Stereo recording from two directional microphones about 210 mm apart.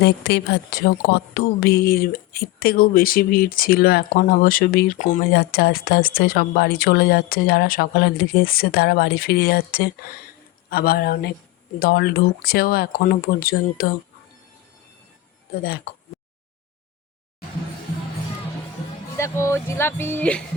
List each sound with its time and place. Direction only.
0.0 s speech: 50° left (ahead or behind)
5.3 s speech: 45° left (ahead or behind)
19.1 s speech: 15° left (ahead or behind)